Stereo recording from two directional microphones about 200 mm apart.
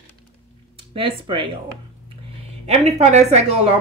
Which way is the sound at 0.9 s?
25° right (ahead or behind).